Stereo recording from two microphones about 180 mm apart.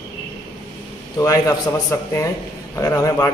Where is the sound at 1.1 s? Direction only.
20° left (ahead or behind).